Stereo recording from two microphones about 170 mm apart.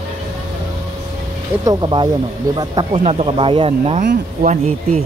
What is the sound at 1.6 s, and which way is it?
Speech, 25° right (ahead or behind).